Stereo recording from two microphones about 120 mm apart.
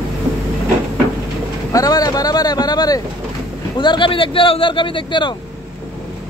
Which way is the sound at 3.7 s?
40° left (ahead or behind).